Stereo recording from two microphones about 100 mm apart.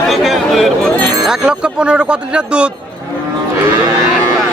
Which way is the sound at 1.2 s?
5° right (ahead or behind).